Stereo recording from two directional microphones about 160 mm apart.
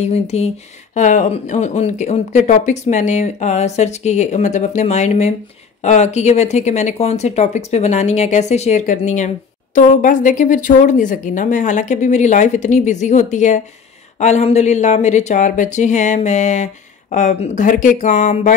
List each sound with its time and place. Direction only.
0.0 s speech: 40° left (ahead or behind)